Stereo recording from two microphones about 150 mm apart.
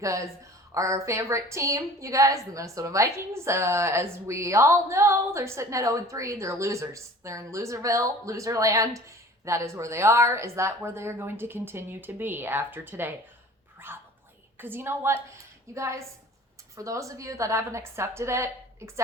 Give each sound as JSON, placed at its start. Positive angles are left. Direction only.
{"t": 0.7, "sound": "a woman's voice", "side_deg": -20}
{"t": 13.7, "sound": "dog", "side_deg": -15}
{"t": 14.6, "sound": "a woman's voice", "side_deg": -15}